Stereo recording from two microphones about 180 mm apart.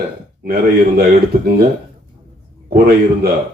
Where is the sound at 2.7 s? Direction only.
55° right (ahead or behind).